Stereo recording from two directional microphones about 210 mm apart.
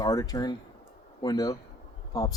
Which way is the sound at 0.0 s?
15° left (ahead or behind).